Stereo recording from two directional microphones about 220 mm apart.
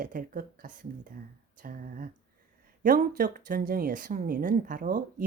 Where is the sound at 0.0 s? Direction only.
40° right (ahead or behind).